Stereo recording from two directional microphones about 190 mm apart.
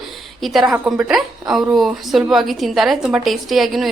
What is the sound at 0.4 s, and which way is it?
A woman's voice, centre (ahead or behind).